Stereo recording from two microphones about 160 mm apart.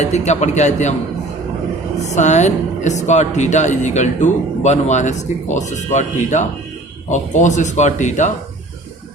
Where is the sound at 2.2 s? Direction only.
45° left (ahead or behind).